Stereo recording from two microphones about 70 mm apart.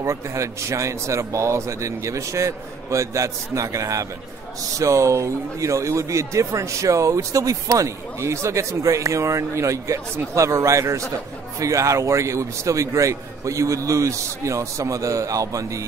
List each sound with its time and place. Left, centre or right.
0.0 s speech: right